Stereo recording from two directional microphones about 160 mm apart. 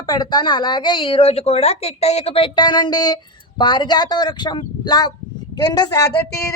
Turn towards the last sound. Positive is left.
turn(degrees=20)  # may be behind; listen again after turning